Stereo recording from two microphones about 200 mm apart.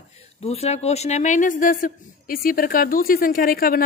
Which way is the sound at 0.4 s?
30° left (ahead or behind).